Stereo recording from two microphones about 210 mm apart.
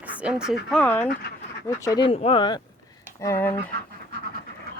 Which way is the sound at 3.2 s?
10° left (ahead or behind).